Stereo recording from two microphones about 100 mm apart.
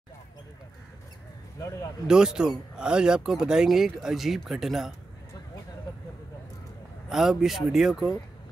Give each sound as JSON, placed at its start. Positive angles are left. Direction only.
{"t": 1.6, "sound": "speech", "side_deg": 30}
{"t": 2.0, "sound": "speech", "side_deg": -5}
{"t": 7.1, "sound": "speech", "side_deg": -5}